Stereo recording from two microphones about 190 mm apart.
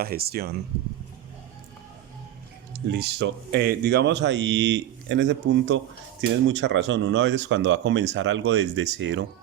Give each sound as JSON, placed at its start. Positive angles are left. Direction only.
{"t": 0.0, "sound": "speech", "side_deg": -55}
{"t": 2.9, "sound": "speech", "side_deg": -60}